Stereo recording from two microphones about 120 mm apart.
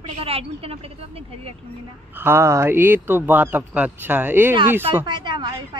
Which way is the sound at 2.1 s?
20° right (ahead or behind).